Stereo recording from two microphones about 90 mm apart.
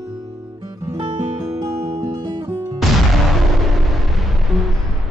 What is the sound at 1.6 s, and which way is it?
Music, 40° right (ahead or behind).